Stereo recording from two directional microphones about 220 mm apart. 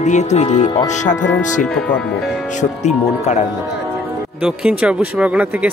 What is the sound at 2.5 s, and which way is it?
Speech, 30° left (ahead or behind).